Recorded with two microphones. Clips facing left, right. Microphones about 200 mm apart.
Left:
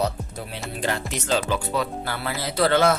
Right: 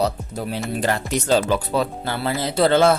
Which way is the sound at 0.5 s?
40° right (ahead or behind).